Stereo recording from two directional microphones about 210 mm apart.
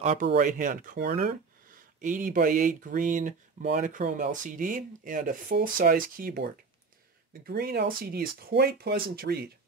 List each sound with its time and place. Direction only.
0.0 s speech: 30° right (ahead or behind)